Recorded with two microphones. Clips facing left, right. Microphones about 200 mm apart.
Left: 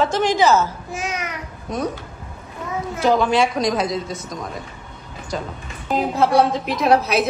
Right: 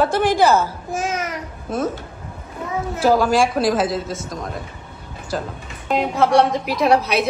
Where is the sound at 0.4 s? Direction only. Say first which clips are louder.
Even; 10° right (ahead or behind).